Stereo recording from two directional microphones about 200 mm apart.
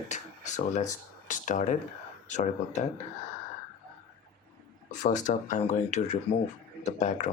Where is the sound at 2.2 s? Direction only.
35° left (ahead or behind).